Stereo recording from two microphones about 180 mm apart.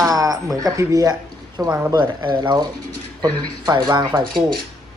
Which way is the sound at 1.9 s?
25° right (ahead or behind).